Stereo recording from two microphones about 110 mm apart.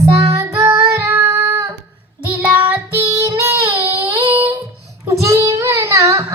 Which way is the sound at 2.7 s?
25° right (ahead or behind).